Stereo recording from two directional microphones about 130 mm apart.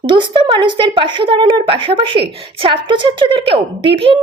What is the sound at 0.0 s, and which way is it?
Speech, 40° right (ahead or behind).